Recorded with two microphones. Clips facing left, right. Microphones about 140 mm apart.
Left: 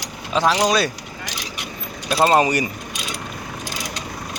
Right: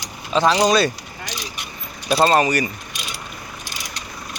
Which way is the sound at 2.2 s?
15° left (ahead or behind).